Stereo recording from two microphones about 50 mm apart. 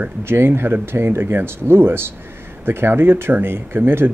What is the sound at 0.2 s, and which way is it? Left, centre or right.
Speech, right.